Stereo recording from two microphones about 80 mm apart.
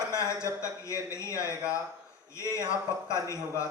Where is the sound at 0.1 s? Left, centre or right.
Left.